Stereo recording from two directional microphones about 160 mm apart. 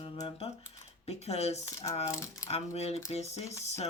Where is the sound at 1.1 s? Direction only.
40° left (ahead or behind).